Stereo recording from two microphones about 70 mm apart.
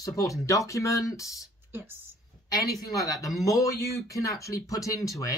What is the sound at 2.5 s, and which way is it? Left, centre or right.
Speech, left.